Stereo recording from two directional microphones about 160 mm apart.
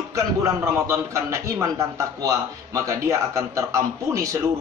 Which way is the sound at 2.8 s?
20° right (ahead or behind).